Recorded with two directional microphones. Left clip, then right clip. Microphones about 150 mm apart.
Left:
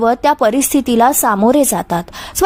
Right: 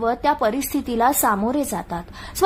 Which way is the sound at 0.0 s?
45° left (ahead or behind).